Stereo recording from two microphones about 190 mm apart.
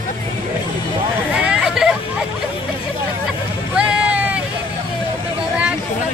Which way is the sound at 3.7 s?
5° right (ahead or behind).